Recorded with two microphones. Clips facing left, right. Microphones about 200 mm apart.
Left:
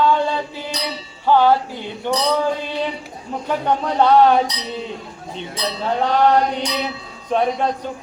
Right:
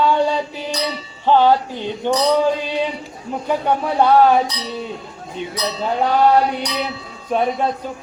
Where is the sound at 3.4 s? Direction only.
10° right (ahead or behind).